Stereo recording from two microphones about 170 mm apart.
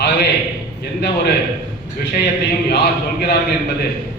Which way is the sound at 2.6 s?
70° left (ahead or behind).